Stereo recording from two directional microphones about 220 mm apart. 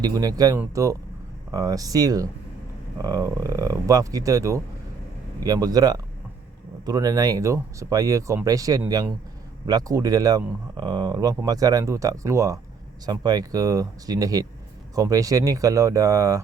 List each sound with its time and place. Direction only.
0.0 s speech: 15° right (ahead or behind)